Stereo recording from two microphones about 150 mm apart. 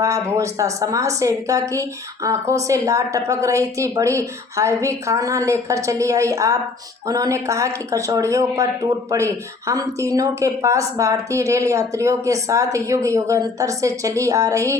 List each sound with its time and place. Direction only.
0.0 s speech: 20° right (ahead or behind)